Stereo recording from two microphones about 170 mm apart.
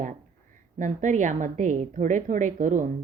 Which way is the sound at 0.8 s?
45° right (ahead or behind).